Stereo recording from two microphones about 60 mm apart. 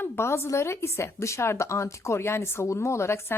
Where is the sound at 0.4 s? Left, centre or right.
Left.